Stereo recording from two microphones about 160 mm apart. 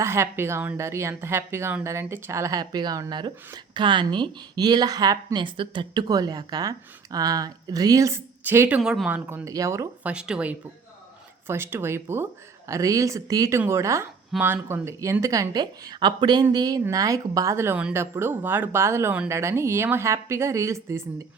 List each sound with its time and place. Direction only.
0.0 s a woman's voice: 15° right (ahead or behind)
10.1 s a woman's voice: 5° right (ahead or behind)